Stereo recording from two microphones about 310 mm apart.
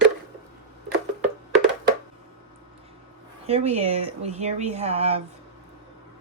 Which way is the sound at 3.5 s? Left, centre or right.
Centre.